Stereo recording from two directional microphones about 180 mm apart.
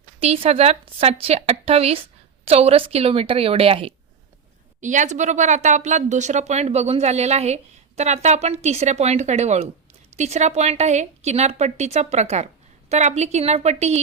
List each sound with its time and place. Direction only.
0.2 s speech: 35° right (ahead or behind)
4.8 s speech: 45° right (ahead or behind)